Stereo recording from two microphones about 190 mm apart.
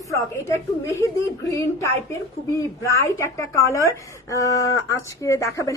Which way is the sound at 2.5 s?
15° left (ahead or behind).